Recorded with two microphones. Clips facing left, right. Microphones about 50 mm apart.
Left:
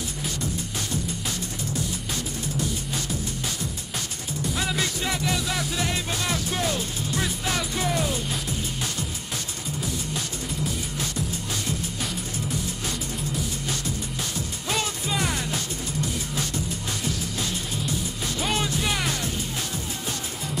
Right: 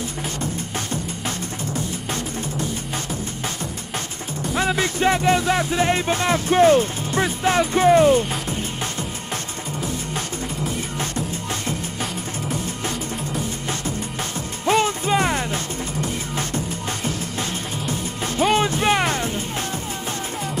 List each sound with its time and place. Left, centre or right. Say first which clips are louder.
4.6 s music: right 8 dB; right
14.7 s music: right 10 dB; right